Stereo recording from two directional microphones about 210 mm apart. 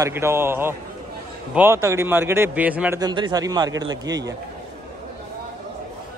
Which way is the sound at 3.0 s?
20° right (ahead or behind).